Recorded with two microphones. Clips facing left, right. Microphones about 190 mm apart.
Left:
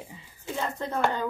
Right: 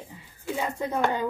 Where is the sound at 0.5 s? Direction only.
10° right (ahead or behind).